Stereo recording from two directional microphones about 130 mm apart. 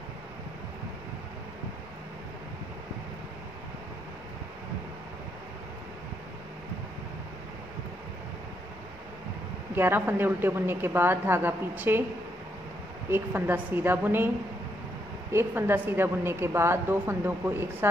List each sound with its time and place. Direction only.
9.8 s a woman's voice: 15° right (ahead or behind)
13.1 s a woman's voice: 15° right (ahead or behind)
15.3 s a woman's voice: 20° right (ahead or behind)